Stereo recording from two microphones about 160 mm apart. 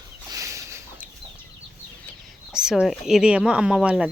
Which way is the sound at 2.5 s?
5° right (ahead or behind).